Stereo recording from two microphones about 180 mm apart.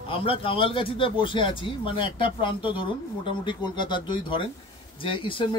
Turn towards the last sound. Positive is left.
turn(degrees=30)  # may be behind; listen again after turning